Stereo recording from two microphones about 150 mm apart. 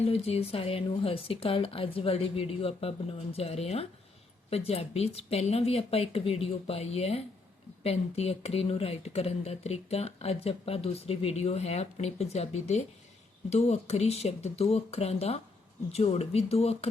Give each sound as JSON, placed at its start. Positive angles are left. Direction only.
{"t": 0.0, "sound": "speech", "side_deg": 40}